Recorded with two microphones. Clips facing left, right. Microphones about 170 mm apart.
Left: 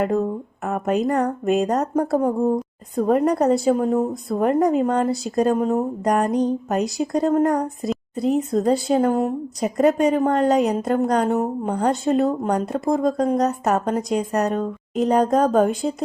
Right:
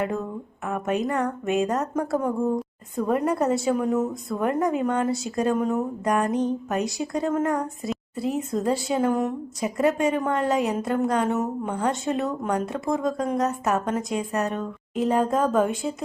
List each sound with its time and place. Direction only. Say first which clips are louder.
0.0 s a woman's voice: left 6 dB; 40° left (ahead or behind)